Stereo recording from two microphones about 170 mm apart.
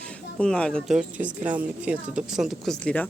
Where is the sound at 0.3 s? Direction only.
5° left (ahead or behind).